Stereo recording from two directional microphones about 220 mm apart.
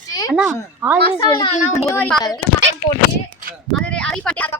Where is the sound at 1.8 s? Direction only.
5° left (ahead or behind).